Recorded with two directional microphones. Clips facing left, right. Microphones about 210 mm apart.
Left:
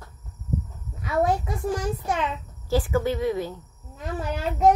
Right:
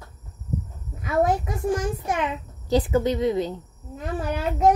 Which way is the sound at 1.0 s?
15° right (ahead or behind).